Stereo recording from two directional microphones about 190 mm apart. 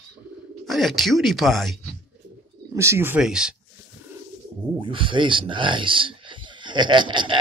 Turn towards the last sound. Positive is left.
turn(degrees=-25)  # may be behind; listen again after turning